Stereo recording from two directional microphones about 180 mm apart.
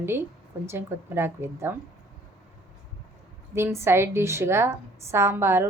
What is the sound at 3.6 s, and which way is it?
A woman's voice, 15° right (ahead or behind).